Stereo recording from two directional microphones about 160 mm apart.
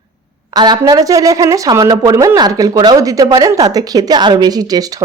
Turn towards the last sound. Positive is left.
turn(degrees=-25)  # may be behind; listen again after turning